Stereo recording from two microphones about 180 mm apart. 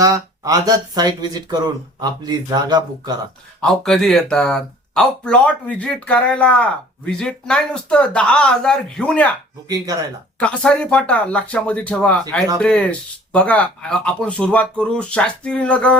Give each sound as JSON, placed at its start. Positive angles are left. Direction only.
{"t": 0.0, "sound": "speech", "side_deg": -20}
{"t": 3.6, "sound": "speech", "side_deg": 0}
{"t": 9.6, "sound": "speech", "side_deg": -20}
{"t": 10.4, "sound": "speech", "side_deg": 5}